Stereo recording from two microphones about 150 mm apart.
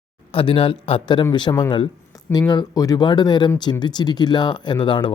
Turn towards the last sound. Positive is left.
turn(degrees=30)  # may be behind; listen again after turning